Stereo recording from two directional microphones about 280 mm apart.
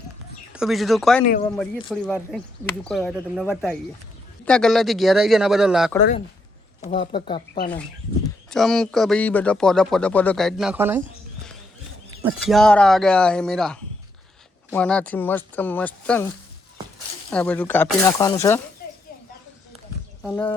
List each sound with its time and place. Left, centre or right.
0.5 s speech: centre
7.1 s speech: centre
8.4 s speech: centre
12.2 s speech: centre
17.3 s speech: centre
18.8 s a sound: left
20.2 s speech: centre